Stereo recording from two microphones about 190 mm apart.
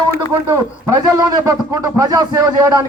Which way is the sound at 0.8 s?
15° right (ahead or behind).